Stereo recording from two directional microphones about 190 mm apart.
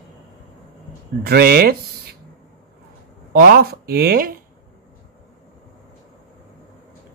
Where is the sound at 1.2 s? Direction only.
55° right (ahead or behind).